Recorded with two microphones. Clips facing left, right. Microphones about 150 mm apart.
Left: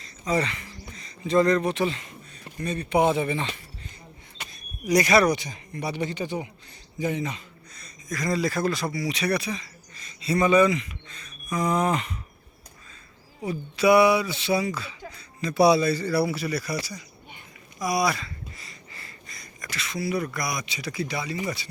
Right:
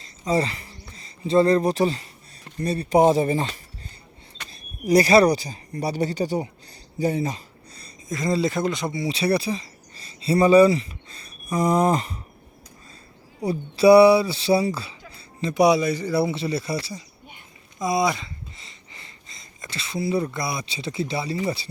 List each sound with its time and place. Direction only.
0.0 s a sound: 30° right (ahead or behind)
0.9 s speech: 30° right (ahead or behind)
13.4 s speech: 35° right (ahead or behind)
15.5 s speech: 15° right (ahead or behind)